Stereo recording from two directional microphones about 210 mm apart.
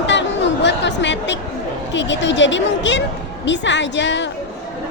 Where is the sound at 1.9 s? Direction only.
60° left (ahead or behind).